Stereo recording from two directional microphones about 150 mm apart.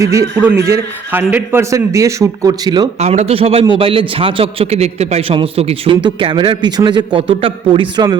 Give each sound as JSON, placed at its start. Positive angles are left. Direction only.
{"t": 0.0, "sound": "a man's voice", "side_deg": -20}
{"t": 3.0, "sound": "a man's voice", "side_deg": -45}